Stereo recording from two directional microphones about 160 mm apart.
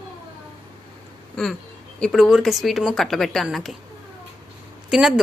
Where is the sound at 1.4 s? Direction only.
5° left (ahead or behind).